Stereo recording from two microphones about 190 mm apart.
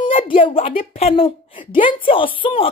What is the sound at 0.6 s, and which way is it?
Speech, 45° left (ahead or behind).